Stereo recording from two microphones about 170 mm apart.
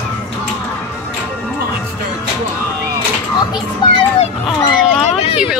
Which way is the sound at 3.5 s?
30° left (ahead or behind).